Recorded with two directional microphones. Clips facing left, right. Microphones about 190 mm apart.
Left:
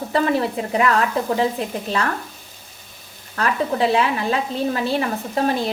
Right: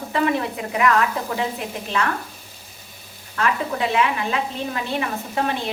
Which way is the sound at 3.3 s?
35° left (ahead or behind).